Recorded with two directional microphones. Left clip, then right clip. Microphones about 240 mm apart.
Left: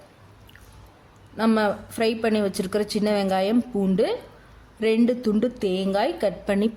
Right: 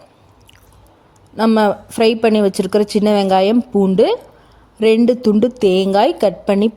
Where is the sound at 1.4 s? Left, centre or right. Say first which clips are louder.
Right 8 dB; right.